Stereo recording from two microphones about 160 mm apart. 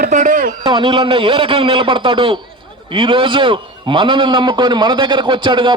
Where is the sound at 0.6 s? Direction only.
30° right (ahead or behind).